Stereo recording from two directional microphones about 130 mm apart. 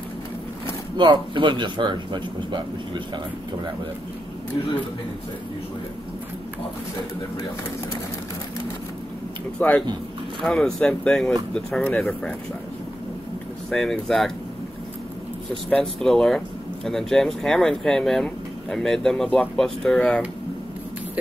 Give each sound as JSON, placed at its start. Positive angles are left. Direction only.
{"t": 0.9, "sound": "speech", "side_deg": -35}
{"t": 9.6, "sound": "speech", "side_deg": 10}
{"t": 13.7, "sound": "speech", "side_deg": 5}
{"t": 15.7, "sound": "speech", "side_deg": 5}